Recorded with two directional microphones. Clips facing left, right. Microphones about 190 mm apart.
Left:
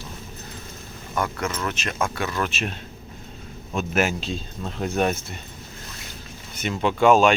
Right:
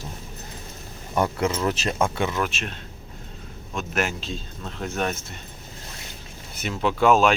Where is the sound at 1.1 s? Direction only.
30° right (ahead or behind).